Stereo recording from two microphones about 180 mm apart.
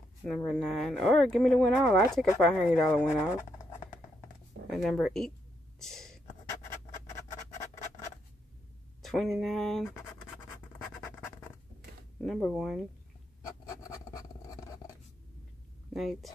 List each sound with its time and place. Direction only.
0.4 s speech: 5° left (ahead or behind)
4.6 s speech: centre (ahead or behind)
5.8 s whispering: centre (ahead or behind)
9.0 s speech: centre (ahead or behind)
12.2 s speech: centre (ahead or behind)
13.7 s a sound: 20° left (ahead or behind)
15.9 s speech: centre (ahead or behind)